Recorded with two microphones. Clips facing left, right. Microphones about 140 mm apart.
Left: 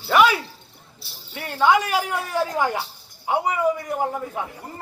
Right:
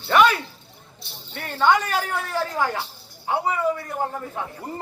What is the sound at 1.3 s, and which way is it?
Speech, 10° left (ahead or behind).